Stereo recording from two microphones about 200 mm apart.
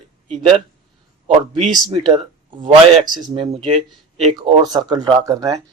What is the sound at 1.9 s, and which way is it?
Speech, 25° right (ahead or behind).